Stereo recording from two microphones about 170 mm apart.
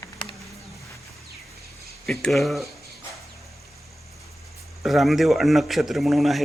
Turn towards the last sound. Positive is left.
turn(degrees=0)  # may be behind; listen again after turning